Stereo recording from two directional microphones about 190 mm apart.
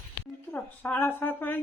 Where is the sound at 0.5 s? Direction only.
10° left (ahead or behind).